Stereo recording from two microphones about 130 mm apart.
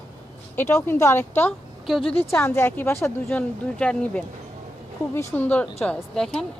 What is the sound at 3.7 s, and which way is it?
Speech, 10° left (ahead or behind).